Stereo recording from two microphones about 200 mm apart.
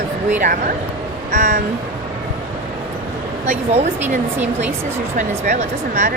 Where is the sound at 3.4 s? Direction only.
30° right (ahead or behind).